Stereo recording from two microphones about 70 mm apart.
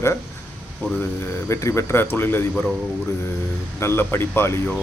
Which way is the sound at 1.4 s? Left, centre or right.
Left.